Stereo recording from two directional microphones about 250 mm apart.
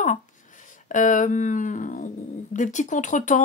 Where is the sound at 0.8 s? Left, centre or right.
Left.